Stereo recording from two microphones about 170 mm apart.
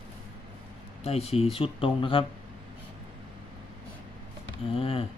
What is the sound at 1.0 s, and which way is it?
Speech, 35° left (ahead or behind).